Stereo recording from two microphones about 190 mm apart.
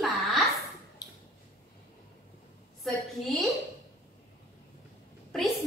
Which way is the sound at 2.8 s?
Centre (ahead or behind).